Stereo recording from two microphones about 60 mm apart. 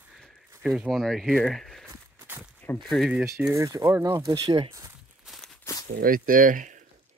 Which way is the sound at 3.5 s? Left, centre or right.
Right.